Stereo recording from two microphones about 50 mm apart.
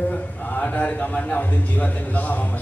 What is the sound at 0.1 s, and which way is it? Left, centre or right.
A man's voice, left.